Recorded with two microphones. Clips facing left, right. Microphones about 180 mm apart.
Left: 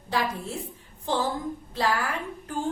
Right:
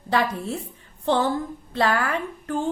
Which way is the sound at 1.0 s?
65° right (ahead or behind).